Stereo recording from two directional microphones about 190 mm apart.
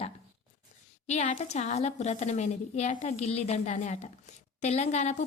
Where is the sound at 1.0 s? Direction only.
35° left (ahead or behind).